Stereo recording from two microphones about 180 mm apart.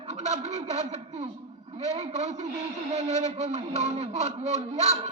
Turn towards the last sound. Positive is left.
turn(degrees=-40)  # may be behind; listen again after turning